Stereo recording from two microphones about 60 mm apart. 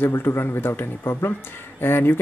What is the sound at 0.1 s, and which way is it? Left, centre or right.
Speech, left.